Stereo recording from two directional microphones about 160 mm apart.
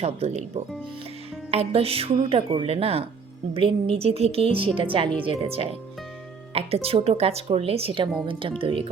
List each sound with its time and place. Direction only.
0.0 s speech: 40° right (ahead or behind)